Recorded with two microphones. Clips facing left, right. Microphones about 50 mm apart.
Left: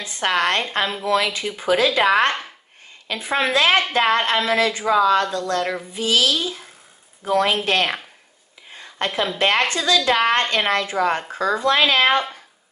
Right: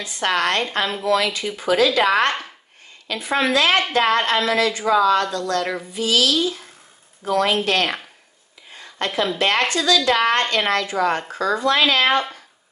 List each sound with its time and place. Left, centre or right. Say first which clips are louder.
0.0 s a woman's voice: even; left
2.0 s a woman's voice: left 1 dB; centre
8.7 s a sound: even; left
9.4 s a woman's voice: left 2 dB; left